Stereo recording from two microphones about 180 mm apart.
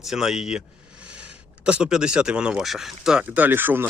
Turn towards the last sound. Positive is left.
turn(degrees=-10)  # may be behind; listen again after turning